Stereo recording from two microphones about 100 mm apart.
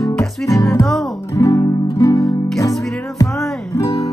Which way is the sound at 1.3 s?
35° left (ahead or behind).